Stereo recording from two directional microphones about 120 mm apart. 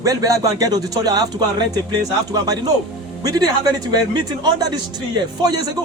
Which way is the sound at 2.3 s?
30° right (ahead or behind).